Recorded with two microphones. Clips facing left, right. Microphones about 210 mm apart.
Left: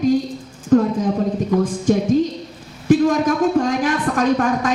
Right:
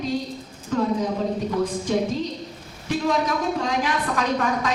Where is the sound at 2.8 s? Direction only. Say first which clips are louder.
Left 8 dB; 50° left (ahead or behind).